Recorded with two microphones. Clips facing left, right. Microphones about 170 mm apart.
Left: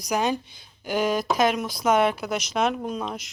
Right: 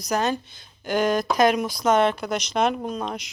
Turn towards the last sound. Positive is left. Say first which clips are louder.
# right 1 dB
turn(degrees=5)  # may be behind; listen again after turning